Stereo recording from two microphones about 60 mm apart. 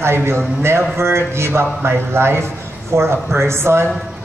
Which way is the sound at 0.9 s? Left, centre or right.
Right.